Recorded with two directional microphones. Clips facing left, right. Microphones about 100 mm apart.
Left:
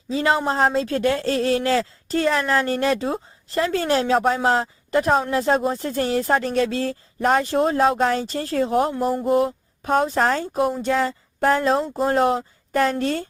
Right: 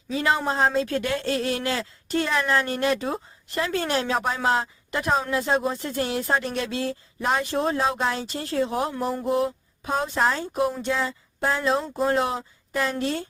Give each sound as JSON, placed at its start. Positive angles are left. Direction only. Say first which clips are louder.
{"t": 0.1, "sound": "speech", "louder": "left 3 dB", "side_deg": 30}
{"t": 9.1, "sound": "a sound", "louder": "left 4 dB", "side_deg": 35}
{"t": 10.8, "sound": "speech", "louder": "left 5 dB", "side_deg": 45}